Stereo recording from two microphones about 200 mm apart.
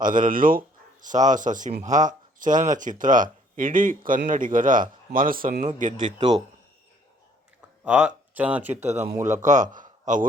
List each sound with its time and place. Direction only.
0.0 s speech: 40° right (ahead or behind)
6.1 s a man's voice: 20° right (ahead or behind)
7.9 s speech: 5° right (ahead or behind)
8.8 s a man's voice: 35° right (ahead or behind)